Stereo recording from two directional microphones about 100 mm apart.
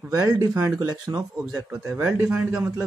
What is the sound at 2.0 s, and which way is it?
Speech, 25° right (ahead or behind).